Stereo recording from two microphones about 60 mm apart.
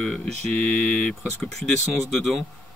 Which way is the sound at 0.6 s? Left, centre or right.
Left.